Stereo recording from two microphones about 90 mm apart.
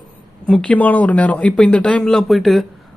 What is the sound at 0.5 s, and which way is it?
Speech, 10° left (ahead or behind).